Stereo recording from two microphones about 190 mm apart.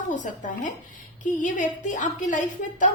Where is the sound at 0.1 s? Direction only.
40° left (ahead or behind).